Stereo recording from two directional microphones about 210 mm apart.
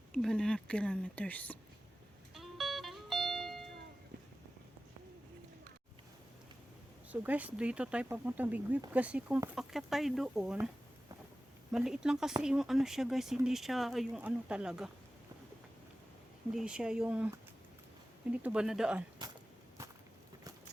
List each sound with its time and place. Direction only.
0.2 s speech: 5° left (ahead or behind)
2.3 s music: centre (ahead or behind)
7.1 s speech: 5° right (ahead or behind)
11.7 s speech: centre (ahead or behind)
16.5 s speech: 5° right (ahead or behind)